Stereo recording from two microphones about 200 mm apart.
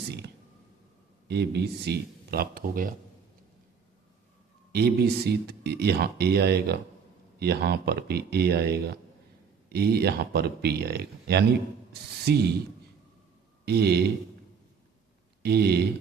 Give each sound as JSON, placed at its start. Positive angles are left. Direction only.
{"t": 1.2, "sound": "speech", "side_deg": -55}
{"t": 4.7, "sound": "speech", "side_deg": -50}
{"t": 13.7, "sound": "speech", "side_deg": -55}
{"t": 15.4, "sound": "speech", "side_deg": -55}